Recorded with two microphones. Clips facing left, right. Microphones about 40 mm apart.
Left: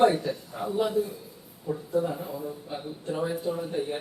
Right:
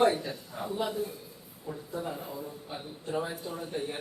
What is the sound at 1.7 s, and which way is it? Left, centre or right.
Speech, centre.